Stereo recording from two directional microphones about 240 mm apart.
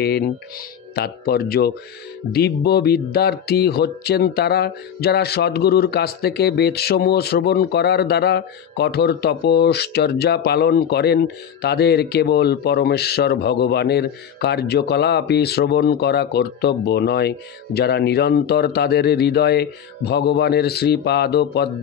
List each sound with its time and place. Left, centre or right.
0.0 s speech: left